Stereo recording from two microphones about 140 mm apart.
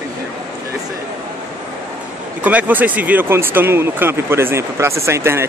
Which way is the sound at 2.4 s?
10° right (ahead or behind).